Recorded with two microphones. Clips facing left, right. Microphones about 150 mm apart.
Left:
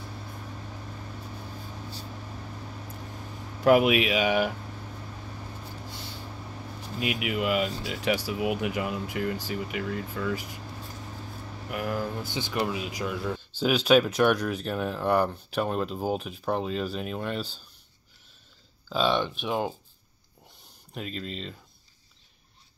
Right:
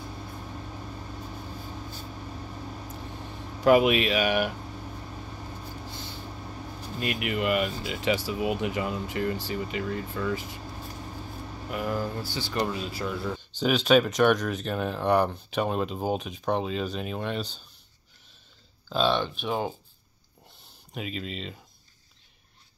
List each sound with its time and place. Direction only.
3.6 s speech: 5° left (ahead or behind)
7.0 s speech: 5° left (ahead or behind)
11.7 s speech: 5° left (ahead or behind)
12.2 s speech: 20° left (ahead or behind)
12.5 s speech: 5° left (ahead or behind)
18.9 s speech: 10° left (ahead or behind)
20.9 s speech: 5° right (ahead or behind)